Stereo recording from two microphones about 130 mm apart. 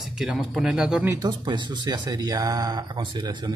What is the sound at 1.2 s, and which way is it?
Speech, 35° right (ahead or behind).